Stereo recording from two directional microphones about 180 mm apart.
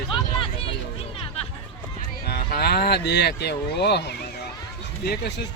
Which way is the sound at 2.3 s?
60° left (ahead or behind).